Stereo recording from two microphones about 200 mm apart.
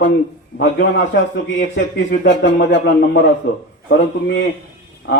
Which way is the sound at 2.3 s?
65° left (ahead or behind).